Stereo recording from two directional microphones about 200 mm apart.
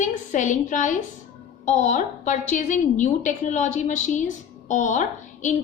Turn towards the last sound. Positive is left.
turn(degrees=40)  # may be behind; listen again after turning